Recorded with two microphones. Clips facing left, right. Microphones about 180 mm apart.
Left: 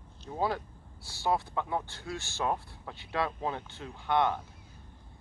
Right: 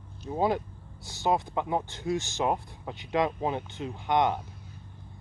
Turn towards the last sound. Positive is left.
turn(degrees=-15)  # may be behind; listen again after turning